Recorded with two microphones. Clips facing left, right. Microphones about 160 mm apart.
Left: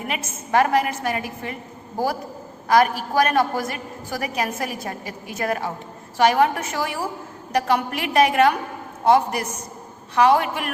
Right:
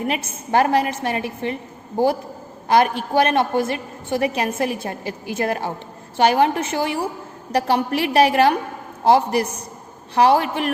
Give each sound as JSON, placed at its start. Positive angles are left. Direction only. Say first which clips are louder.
{"t": 0.1, "sound": "a woman's voice", "louder": "left 1 dB", "side_deg": -30}
{"t": 2.6, "sound": "a woman's voice", "louder": "right 1 dB", "side_deg": -30}